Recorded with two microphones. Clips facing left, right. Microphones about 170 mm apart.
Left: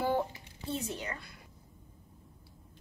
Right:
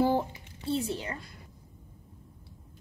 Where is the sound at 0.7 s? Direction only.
30° right (ahead or behind).